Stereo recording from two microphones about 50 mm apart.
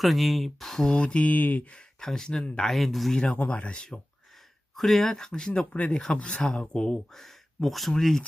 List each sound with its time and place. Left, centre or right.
0.0 s speech: centre
0.9 s speech: left
2.0 s speech: centre
3.2 s speech: left
4.8 s speech: centre